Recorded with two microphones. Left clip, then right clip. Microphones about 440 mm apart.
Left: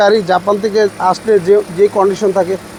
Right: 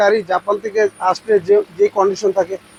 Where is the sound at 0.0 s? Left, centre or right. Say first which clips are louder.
Left 4 dB; right.